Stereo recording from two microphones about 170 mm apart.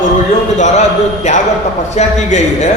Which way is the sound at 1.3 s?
45° left (ahead or behind).